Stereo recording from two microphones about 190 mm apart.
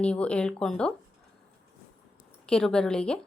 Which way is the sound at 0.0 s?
5° left (ahead or behind).